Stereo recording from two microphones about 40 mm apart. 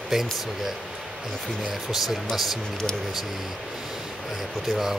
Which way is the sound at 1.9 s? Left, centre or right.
Centre.